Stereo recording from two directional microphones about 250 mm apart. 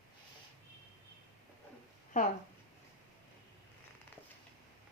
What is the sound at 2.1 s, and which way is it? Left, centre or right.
Speech, left.